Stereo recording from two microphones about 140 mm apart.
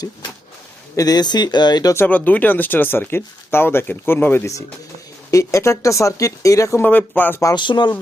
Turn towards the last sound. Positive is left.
turn(degrees=30)  # may be behind; listen again after turning